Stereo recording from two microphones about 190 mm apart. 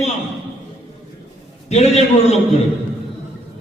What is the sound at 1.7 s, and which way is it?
Speech, 35° left (ahead or behind).